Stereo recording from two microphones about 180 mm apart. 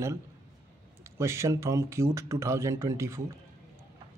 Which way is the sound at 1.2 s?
15° right (ahead or behind).